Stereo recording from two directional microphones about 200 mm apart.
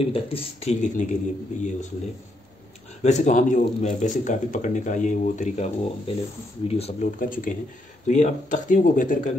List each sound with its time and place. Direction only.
0.0 s speech: 30° left (ahead or behind)
3.0 s speech: 35° left (ahead or behind)